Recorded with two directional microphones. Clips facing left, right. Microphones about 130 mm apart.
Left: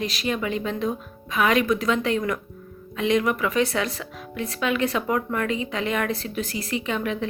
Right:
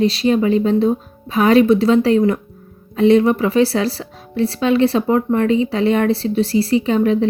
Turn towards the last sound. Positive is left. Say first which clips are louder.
# right 11 dB
turn(degrees=-35)  # may be behind; listen again after turning